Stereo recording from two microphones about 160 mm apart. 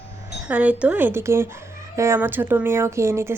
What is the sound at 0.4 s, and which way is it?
Speech, 10° right (ahead or behind).